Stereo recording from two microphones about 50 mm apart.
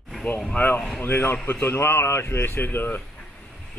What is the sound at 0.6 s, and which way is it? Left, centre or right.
Speech, left.